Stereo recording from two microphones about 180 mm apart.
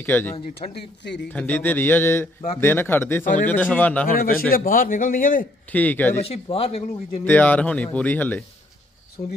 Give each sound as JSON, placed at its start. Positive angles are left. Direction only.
{"t": 0.0, "sound": "speech", "side_deg": 10}
{"t": 0.6, "sound": "speech", "side_deg": 40}
{"t": 1.3, "sound": "speech", "side_deg": 10}
{"t": 4.2, "sound": "a man's voice", "side_deg": 55}
{"t": 5.7, "sound": "speech", "side_deg": 10}
{"t": 6.2, "sound": "speech", "side_deg": 35}
{"t": 7.2, "sound": "speech", "side_deg": 10}